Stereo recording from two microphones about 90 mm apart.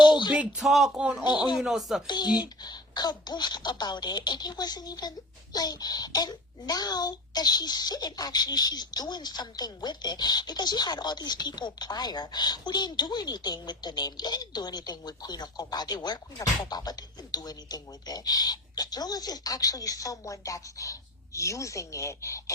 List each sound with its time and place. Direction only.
0.0 s a sound: 55° left (ahead or behind)
0.3 s speech: 10° right (ahead or behind)
2.0 s a child's voice: 50° left (ahead or behind)